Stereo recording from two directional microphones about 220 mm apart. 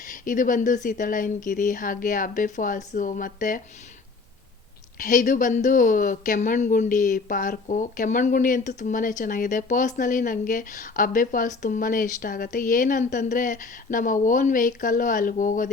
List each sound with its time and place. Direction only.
0.0 s speech: 35° left (ahead or behind)
4.9 s speech: 35° left (ahead or behind)